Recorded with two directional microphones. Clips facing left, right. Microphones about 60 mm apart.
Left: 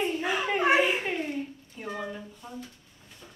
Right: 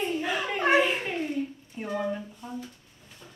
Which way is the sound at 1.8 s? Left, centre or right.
Centre.